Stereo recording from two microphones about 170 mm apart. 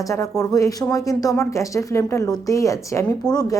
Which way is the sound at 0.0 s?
20° left (ahead or behind).